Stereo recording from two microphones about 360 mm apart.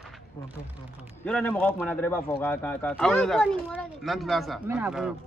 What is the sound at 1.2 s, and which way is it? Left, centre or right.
Speech, centre.